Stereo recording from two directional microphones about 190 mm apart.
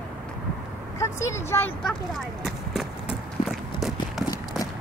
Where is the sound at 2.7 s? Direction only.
Centre (ahead or behind).